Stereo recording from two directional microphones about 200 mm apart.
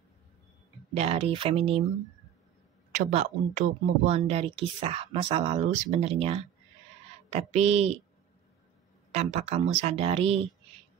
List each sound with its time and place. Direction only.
0.9 s speech: 30° right (ahead or behind)
2.9 s speech: 35° right (ahead or behind)
9.1 s speech: 30° right (ahead or behind)